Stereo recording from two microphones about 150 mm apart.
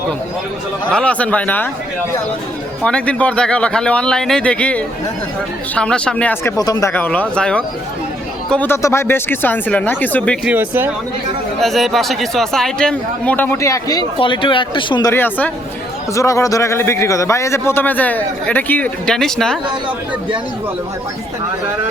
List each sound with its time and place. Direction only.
0.9 s a man's voice: 5° left (ahead or behind)
2.8 s a man's voice: 5° left (ahead or behind)
6.6 s speech: 25° left (ahead or behind)
6.9 s a man's voice: 10° left (ahead or behind)
10.4 s speech: 10° right (ahead or behind)
11.6 s speech: centre (ahead or behind); by 14.0 s 20° left (ahead or behind)
14.2 s speech: 35° left (ahead or behind)
15.1 s a man's voice: 10° left (ahead or behind)